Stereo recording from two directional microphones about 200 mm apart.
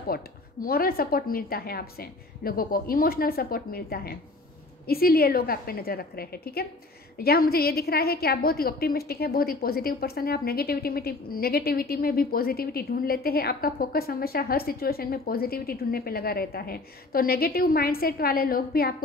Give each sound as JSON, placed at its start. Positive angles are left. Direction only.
{"t": 0.1, "sound": "a woman's voice", "side_deg": 50}